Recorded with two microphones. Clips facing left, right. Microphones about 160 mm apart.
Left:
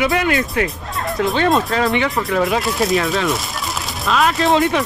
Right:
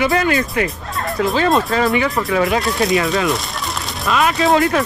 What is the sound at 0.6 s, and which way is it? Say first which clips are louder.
Speech: even; centre (ahead or behind).